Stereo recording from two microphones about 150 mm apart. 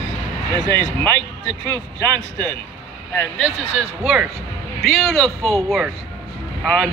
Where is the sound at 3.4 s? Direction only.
Centre (ahead or behind).